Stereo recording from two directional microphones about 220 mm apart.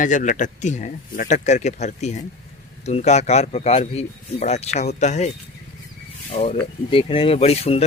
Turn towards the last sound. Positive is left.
turn(degrees=25)  # may be behind; listen again after turning